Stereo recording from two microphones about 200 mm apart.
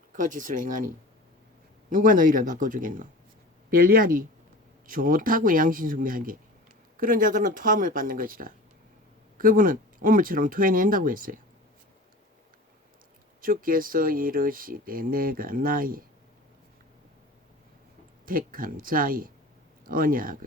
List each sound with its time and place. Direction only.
0.2 s speech: 40° right (ahead or behind)
1.9 s speech: 40° right (ahead or behind)
13.4 s speech: 45° right (ahead or behind)
18.3 s speech: 45° right (ahead or behind)